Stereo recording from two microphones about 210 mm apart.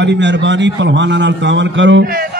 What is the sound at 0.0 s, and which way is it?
A man's voice, 60° right (ahead or behind).